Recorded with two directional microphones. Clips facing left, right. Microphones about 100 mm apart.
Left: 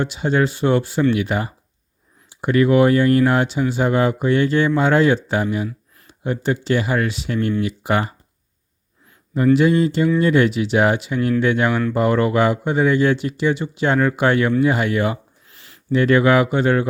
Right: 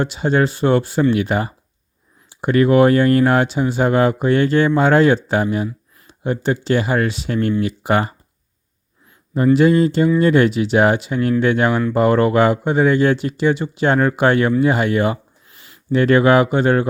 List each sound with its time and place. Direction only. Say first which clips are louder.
0.0 s speech: right 2 dB; 40° right (ahead or behind)
9.3 s speech: right 2 dB; 40° right (ahead or behind)